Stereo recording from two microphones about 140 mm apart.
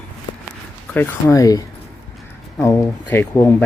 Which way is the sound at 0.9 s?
20° left (ahead or behind).